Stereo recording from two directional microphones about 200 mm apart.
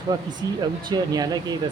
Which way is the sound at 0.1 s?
15° right (ahead or behind).